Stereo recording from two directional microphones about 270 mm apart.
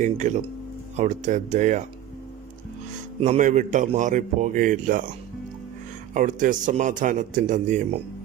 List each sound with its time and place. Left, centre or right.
0.0 s a man's voice: right
3.2 s a man's voice: right
6.1 s a man's voice: right